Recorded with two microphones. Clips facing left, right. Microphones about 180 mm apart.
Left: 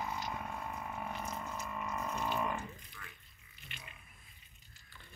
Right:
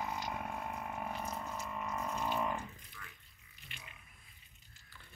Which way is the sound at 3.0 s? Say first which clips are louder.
Right 3 dB; 40° left (ahead or behind).